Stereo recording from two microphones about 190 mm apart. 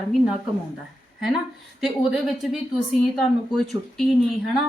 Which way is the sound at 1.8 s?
Centre (ahead or behind).